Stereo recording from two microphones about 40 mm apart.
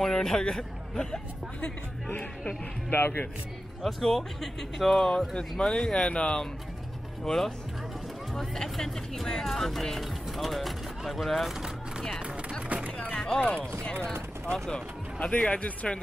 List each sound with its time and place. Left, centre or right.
0.0 s a man's voice: centre
2.9 s speech: left
3.8 s a man's voice: centre
12.6 s a sound: right
13.1 s speech: left
15.1 s a man's voice: left